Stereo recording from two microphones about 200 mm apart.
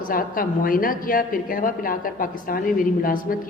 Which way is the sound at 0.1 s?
45° left (ahead or behind).